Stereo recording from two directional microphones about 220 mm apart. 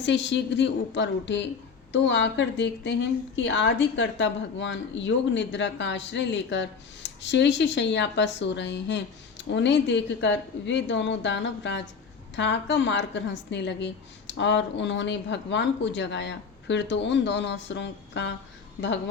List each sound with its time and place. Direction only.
0.0 s a woman's voice: 55° left (ahead or behind)